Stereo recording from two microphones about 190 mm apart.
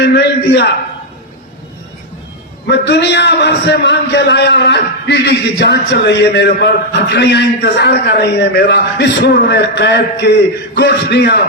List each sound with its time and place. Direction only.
0.0 s a man's voice: 65° left (ahead or behind)
2.6 s a man's voice: 65° left (ahead or behind)